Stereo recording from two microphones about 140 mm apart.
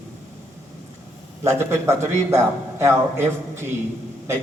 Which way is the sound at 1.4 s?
20° right (ahead or behind).